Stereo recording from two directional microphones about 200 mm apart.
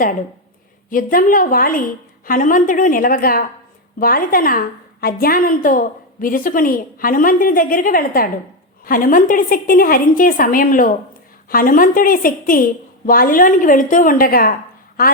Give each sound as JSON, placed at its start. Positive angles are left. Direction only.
{"t": 0.9, "sound": "a woman's voice", "side_deg": 45}